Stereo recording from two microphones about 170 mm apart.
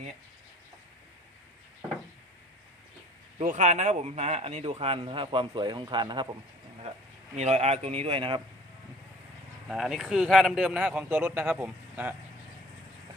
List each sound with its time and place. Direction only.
3.3 s a man's voice: 45° right (ahead or behind); by 6.2 s 25° right (ahead or behind)
7.3 s a man's voice: 40° right (ahead or behind)
9.6 s speech: 5° right (ahead or behind)